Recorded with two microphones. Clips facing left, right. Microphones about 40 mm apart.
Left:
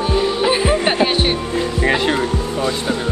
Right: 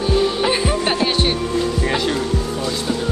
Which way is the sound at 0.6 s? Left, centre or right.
Centre.